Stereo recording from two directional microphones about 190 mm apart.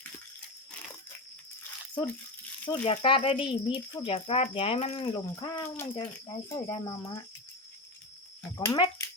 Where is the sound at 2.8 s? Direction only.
30° left (ahead or behind).